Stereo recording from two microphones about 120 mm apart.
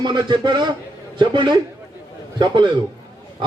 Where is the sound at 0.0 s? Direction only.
40° right (ahead or behind).